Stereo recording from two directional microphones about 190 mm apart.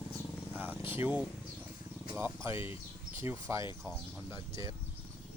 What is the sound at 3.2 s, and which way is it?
Speech, 15° right (ahead or behind).